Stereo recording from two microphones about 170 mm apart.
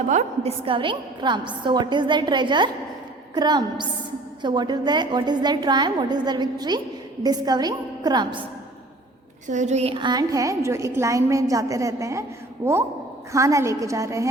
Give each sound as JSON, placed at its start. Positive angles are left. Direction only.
{"t": 0.1, "sound": "a woman's voice", "side_deg": -40}
{"t": 9.5, "sound": "a woman's voice", "side_deg": -45}